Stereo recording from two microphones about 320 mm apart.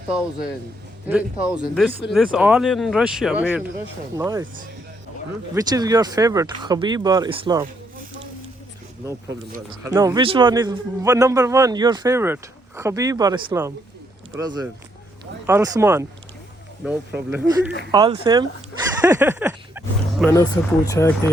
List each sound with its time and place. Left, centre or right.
1.0 s a man's voice: centre
5.5 s a man's voice: centre
9.3 s speech: right
9.8 s a man's voice: centre
20.2 s speech: centre